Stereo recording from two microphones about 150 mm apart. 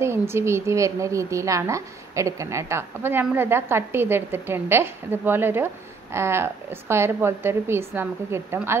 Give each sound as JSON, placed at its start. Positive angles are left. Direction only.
{"t": 0.0, "sound": "a woman's voice", "side_deg": -15}